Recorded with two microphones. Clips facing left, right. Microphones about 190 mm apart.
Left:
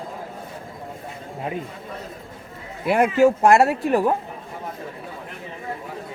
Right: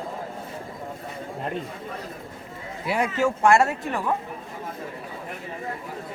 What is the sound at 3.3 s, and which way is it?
Speech, 40° left (ahead or behind).